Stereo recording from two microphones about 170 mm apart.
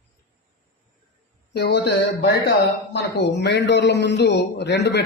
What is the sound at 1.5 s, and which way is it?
A man's voice, 85° left.